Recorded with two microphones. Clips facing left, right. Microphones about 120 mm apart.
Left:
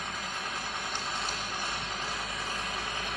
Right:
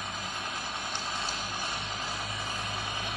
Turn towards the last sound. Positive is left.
turn(degrees=-10)  # may be behind; listen again after turning